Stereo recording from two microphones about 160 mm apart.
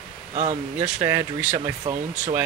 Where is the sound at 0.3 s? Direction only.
40° right (ahead or behind).